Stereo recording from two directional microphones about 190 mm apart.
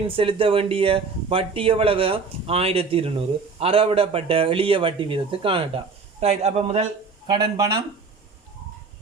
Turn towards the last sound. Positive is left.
turn(degrees=-20)  # may be behind; listen again after turning